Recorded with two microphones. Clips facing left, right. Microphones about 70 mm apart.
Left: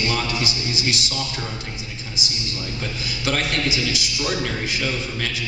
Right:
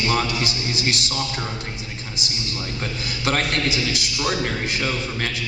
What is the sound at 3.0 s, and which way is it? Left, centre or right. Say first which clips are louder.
A man's voice: right 1 dB; right.